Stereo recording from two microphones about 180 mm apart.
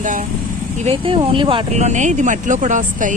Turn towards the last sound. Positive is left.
turn(degrees=-45)  # may be behind; listen again after turning